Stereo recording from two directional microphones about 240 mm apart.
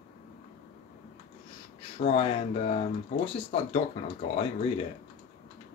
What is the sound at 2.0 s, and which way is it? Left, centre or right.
Speech, left.